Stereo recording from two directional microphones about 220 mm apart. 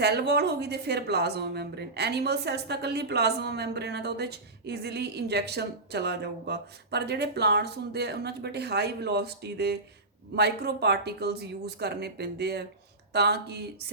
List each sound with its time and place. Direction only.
0.0 s a woman's voice: 50° right (ahead or behind)